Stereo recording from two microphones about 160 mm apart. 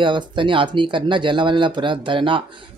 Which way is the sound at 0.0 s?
30° right (ahead or behind).